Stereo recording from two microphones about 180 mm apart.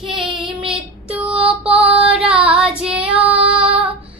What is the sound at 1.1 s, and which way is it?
Female singing, 5° right (ahead or behind).